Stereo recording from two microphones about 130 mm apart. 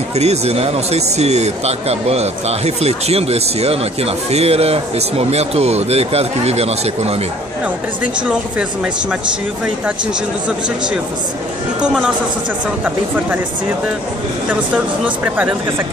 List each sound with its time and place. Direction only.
0.1 s speech: 55° right (ahead or behind)
7.6 s speech: 10° right (ahead or behind)
11.8 s a woman's voice: 5° right (ahead or behind)
15.0 s speech: 10° right (ahead or behind)